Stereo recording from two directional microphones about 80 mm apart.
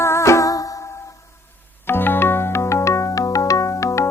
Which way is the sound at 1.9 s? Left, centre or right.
Left.